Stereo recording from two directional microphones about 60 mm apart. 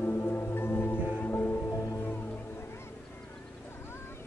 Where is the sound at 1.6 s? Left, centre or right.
Left.